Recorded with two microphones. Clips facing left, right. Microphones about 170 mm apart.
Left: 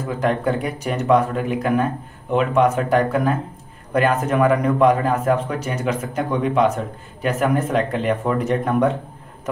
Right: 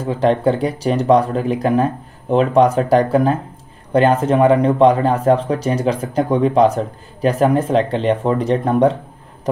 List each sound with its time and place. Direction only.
0.0 s a man's voice: 30° right (ahead or behind)